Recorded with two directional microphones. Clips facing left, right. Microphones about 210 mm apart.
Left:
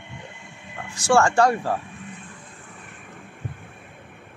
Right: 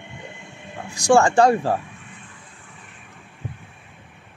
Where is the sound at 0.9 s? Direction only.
15° right (ahead or behind).